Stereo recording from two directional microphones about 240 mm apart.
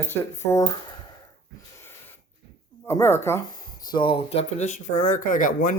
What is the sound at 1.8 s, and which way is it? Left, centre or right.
Wheeze, centre.